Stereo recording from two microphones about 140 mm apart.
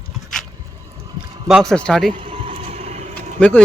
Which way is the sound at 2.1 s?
40° right (ahead or behind).